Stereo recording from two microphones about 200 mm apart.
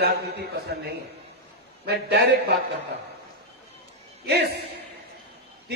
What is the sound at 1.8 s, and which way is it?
Speech, 55° right (ahead or behind).